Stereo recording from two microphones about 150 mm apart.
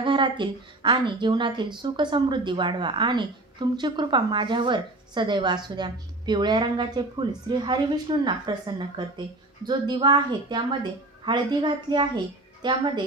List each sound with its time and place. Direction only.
0.0 s a woman's voice: 35° right (ahead or behind)